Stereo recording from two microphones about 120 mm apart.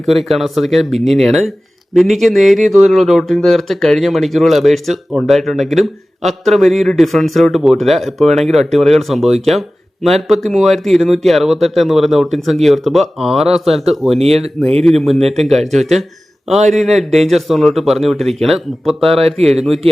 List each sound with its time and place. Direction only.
0.0 s speech: centre (ahead or behind)